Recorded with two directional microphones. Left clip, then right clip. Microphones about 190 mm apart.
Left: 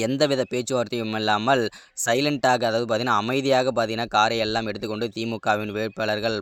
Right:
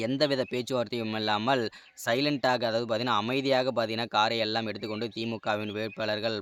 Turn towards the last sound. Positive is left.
turn(degrees=35)  # may be behind; listen again after turning